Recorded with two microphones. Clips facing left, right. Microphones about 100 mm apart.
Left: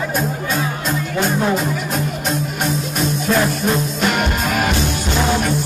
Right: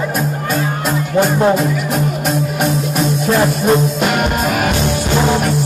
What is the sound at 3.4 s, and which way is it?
Music, 45° right (ahead or behind).